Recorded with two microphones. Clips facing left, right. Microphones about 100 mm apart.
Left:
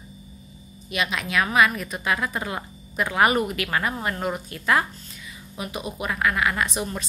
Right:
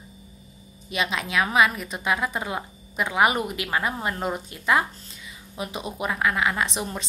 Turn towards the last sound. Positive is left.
turn(degrees=-25)  # may be behind; listen again after turning